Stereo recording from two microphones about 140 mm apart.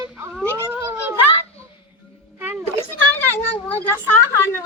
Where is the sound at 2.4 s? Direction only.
15° right (ahead or behind).